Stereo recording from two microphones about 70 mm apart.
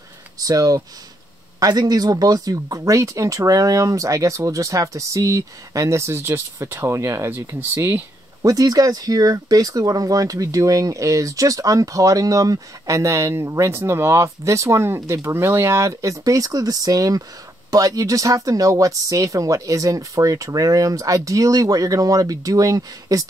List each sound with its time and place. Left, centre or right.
0.4 s speech: right
8.4 s speech: right
15.2 s speech: right